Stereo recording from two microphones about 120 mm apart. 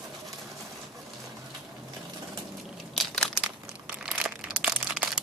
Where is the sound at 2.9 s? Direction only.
Centre (ahead or behind).